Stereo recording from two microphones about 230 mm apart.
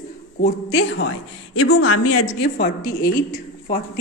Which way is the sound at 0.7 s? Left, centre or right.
Left.